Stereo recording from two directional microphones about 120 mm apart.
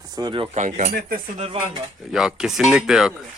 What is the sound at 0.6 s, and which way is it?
Speech, 80° right.